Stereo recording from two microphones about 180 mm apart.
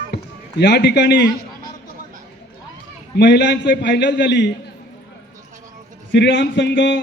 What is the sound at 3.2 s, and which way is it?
A man's voice, 75° left (ahead or behind).